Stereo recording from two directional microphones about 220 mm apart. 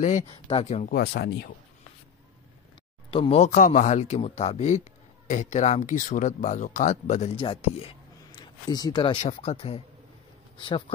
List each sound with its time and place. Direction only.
0.3 s speech: 25° left (ahead or behind)
0.9 s speech: 50° left (ahead or behind)
3.1 s speech: 25° left (ahead or behind)